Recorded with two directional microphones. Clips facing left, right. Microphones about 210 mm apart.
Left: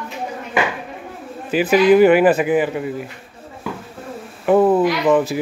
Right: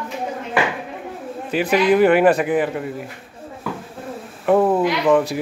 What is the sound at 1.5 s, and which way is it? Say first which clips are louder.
Speech: left 4 dB; 5° left (ahead or behind).